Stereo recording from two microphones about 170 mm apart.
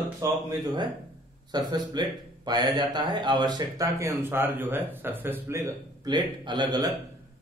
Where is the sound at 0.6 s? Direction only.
25° right (ahead or behind).